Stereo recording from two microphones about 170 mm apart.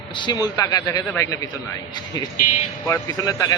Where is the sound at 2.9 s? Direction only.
20° left (ahead or behind).